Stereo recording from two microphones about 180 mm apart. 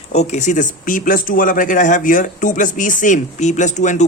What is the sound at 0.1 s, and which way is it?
Speech, 40° left (ahead or behind).